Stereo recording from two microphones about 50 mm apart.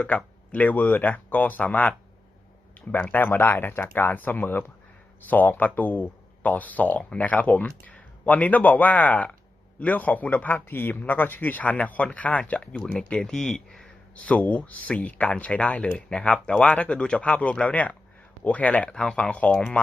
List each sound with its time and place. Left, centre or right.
0.5 s speech: left
2.9 s speech: left
13.0 s speech: centre
14.2 s speech: left